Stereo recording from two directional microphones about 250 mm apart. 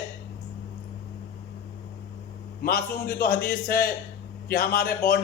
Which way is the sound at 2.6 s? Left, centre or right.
Left.